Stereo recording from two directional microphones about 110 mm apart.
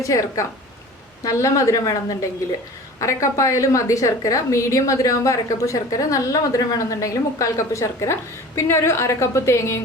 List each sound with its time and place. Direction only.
0.0 s a woman's voice: 30° left (ahead or behind)